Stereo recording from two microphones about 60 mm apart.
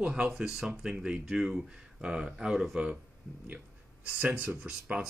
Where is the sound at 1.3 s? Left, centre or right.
Centre.